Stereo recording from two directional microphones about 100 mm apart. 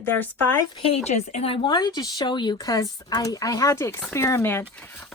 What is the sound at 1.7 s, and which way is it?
Speech, 45° left (ahead or behind).